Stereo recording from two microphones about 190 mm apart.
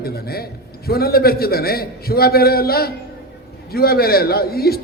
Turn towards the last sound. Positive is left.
turn(degrees=55)  # may be behind; listen again after turning